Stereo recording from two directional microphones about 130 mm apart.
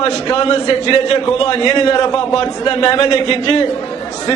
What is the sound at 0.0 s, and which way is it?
A man's voice, 45° left (ahead or behind).